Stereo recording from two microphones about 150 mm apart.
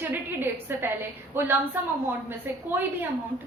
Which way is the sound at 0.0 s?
15° right (ahead or behind).